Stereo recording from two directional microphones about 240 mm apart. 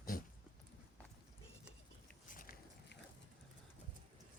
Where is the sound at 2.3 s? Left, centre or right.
Left.